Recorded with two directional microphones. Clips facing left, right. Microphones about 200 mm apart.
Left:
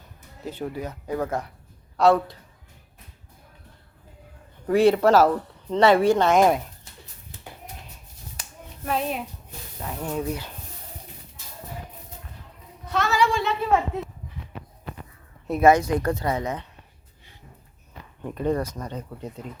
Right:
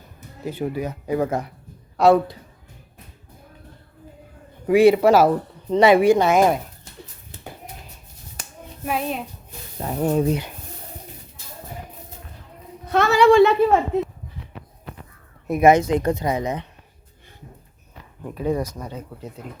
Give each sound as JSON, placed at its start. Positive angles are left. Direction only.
{"t": 0.4, "sound": "speech", "side_deg": -10}
{"t": 4.6, "sound": "speech", "side_deg": -10}
{"t": 8.4, "sound": "hands", "side_deg": -50}
{"t": 8.8, "sound": "a child's voice", "side_deg": -10}
{"t": 9.8, "sound": "speech", "side_deg": -40}
{"t": 10.2, "sound": "speech", "side_deg": -20}
{"t": 12.9, "sound": "a sound", "side_deg": -60}
{"t": 15.4, "sound": "speech", "side_deg": -15}
{"t": 18.2, "sound": "speech", "side_deg": -5}